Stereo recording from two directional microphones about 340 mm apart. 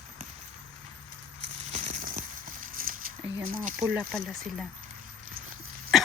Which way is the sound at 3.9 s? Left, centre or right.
Centre.